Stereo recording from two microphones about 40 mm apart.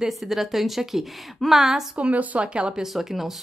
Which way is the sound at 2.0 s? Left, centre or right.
Right.